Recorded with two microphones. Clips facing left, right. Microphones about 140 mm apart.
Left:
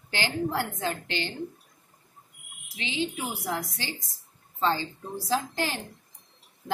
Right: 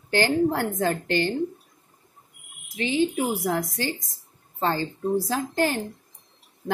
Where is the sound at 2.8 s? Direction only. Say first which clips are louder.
Right 8 dB; 45° right (ahead or behind).